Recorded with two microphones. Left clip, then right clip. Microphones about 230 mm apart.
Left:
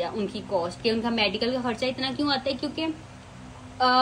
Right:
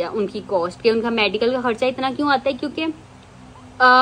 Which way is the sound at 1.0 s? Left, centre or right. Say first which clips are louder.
Right 5 dB; right.